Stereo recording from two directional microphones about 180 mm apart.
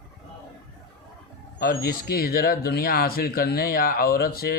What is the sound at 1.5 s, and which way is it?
Speech, 55° left (ahead or behind).